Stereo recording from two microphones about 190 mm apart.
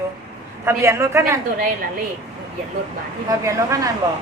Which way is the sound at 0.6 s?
15° right (ahead or behind).